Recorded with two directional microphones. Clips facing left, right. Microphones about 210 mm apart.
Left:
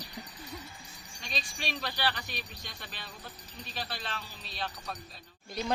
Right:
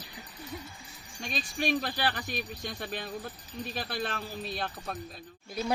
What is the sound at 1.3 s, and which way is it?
Speech, 50° right (ahead or behind).